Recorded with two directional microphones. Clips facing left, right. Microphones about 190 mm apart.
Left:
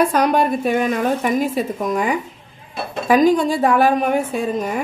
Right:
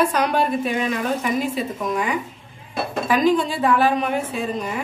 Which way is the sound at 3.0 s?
45° left (ahead or behind).